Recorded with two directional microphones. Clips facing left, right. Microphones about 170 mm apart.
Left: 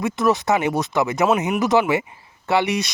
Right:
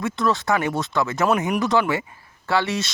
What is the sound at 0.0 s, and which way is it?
Speech, 20° left (ahead or behind).